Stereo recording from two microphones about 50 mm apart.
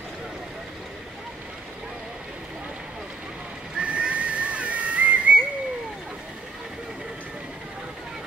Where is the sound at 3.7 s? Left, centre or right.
Right.